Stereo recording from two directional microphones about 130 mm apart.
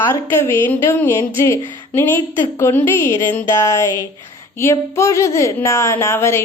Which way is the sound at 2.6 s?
15° left (ahead or behind).